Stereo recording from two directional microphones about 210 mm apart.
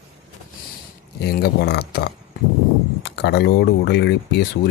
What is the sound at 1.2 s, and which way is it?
Speech, 50° left (ahead or behind).